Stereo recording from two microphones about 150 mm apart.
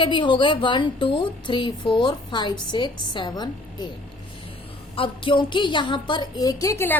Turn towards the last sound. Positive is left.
turn(degrees=20)  # may be behind; listen again after turning